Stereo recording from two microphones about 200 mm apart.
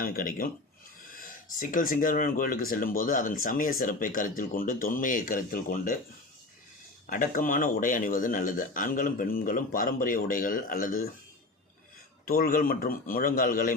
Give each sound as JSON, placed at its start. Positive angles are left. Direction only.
{"t": 0.0, "sound": "speech", "side_deg": 45}
{"t": 7.1, "sound": "speech", "side_deg": 45}
{"t": 12.2, "sound": "speech", "side_deg": 45}